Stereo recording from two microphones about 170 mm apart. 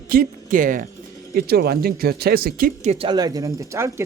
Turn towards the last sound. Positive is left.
turn(degrees=-15)  # may be behind; listen again after turning